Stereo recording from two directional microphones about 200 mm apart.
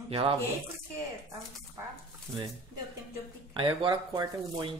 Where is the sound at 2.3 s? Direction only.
15° right (ahead or behind).